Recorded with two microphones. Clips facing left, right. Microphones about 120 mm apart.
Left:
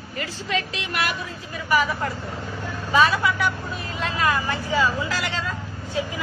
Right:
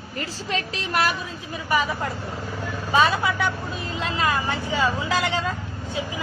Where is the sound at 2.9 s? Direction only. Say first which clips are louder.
Left 1 dB; 25° right (ahead or behind).